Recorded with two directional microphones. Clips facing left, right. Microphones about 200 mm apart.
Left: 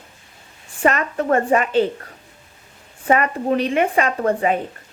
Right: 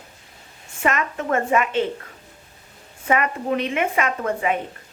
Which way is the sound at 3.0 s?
35° left (ahead or behind).